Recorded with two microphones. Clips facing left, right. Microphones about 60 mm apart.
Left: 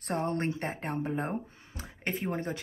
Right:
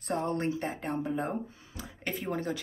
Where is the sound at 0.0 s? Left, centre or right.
Left.